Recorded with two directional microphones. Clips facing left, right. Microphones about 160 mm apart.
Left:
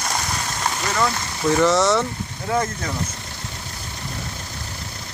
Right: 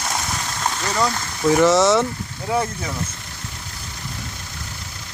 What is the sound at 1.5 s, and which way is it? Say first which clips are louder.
Speech: right 2 dB; 10° right (ahead or behind).